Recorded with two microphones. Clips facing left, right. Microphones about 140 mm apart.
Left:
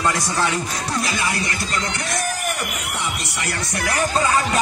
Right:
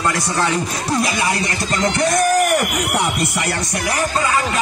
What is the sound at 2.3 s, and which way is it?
Speech, 80° right.